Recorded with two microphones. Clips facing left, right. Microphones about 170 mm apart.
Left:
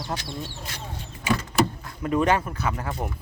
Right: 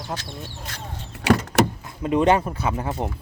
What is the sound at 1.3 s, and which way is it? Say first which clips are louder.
Vehicle: right 6 dB; 75° right (ahead or behind).